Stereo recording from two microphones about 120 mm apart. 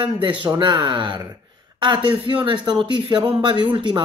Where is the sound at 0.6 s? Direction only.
40° right (ahead or behind).